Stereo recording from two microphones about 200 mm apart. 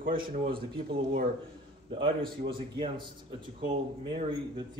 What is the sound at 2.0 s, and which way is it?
Speech, 55° right (ahead or behind).